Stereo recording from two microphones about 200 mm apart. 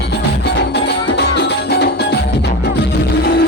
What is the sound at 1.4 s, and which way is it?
Music, 55° left (ahead or behind).